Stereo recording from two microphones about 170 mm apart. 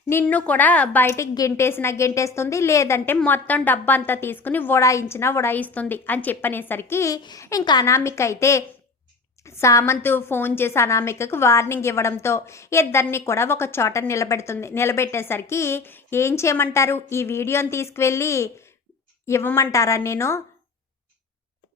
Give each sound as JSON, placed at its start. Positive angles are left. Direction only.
{"t": 0.1, "sound": "a woman's voice", "side_deg": 10}